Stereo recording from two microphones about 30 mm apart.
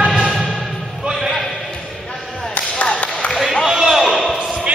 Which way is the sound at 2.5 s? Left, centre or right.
Left.